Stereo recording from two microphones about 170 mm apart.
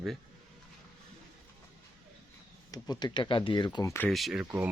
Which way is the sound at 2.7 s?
20° left (ahead or behind).